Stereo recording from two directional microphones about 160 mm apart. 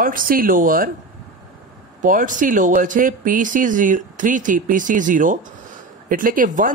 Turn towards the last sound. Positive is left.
turn(degrees=-55)  # may be behind; listen again after turning